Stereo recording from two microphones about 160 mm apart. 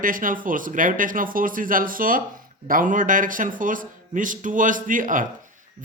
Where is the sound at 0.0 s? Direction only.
60° right (ahead or behind).